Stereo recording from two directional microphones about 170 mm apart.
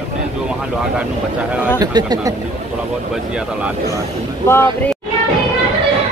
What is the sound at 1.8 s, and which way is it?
Speech, 25° right (ahead or behind).